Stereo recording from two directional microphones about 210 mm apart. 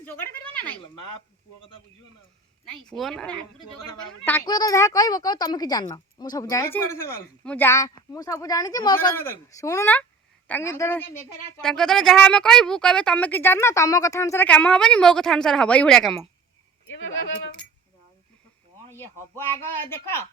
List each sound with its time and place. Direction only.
0.0 s speech: 10° left (ahead or behind)
2.9 s a woman's voice: centre (ahead or behind)
16.8 s speech: 65° left (ahead or behind)
18.9 s speech: 10° left (ahead or behind)